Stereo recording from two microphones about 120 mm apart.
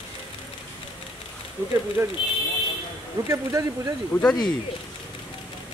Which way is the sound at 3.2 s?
25° right (ahead or behind).